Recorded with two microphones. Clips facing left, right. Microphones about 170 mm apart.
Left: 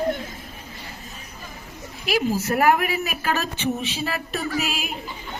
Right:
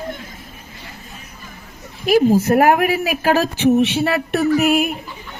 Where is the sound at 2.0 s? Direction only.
50° right (ahead or behind).